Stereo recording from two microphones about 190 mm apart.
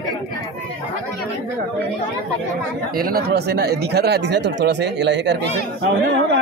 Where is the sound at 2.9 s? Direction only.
50° right (ahead or behind).